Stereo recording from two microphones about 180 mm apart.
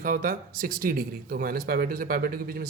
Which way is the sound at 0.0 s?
50° right (ahead or behind).